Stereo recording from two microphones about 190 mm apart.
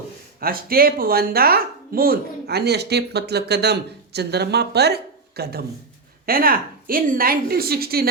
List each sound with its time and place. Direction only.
0.3 s a woman's voice: 50° right (ahead or behind)